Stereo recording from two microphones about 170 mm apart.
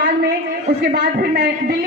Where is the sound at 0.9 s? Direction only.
70° right (ahead or behind).